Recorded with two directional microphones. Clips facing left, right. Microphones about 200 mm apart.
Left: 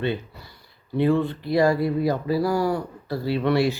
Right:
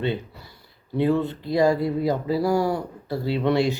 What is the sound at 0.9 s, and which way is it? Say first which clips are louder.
Speech: left 1 dB; 20° right (ahead or behind).